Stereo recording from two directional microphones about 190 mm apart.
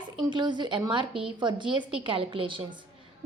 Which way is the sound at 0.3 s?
25° right (ahead or behind).